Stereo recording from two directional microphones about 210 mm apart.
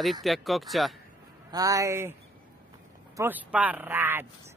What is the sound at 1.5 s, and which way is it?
Speech, 15° right (ahead or behind).